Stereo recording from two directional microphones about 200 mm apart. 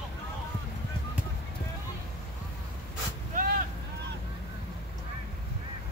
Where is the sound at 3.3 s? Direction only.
45° right (ahead or behind).